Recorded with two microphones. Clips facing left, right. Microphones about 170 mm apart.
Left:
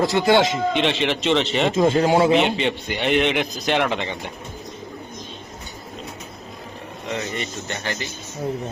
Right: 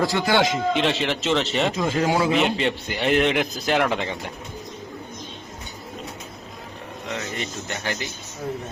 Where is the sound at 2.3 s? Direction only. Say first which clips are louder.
Left 2 dB; centre (ahead or behind).